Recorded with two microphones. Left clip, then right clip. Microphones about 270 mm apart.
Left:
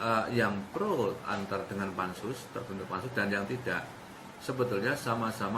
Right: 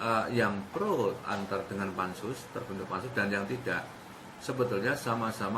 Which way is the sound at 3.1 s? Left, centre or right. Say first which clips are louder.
Even; centre.